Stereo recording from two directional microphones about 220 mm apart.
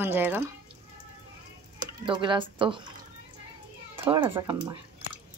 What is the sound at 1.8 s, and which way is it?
Speech, 20° right (ahead or behind).